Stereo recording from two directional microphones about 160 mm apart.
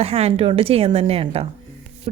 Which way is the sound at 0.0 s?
40° right (ahead or behind).